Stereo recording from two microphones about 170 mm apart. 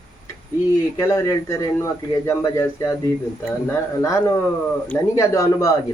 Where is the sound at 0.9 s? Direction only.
15° left (ahead or behind).